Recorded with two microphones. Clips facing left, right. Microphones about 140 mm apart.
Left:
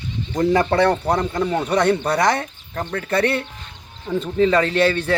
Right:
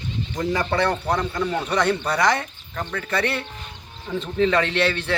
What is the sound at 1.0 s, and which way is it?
Speech, 35° left (ahead or behind).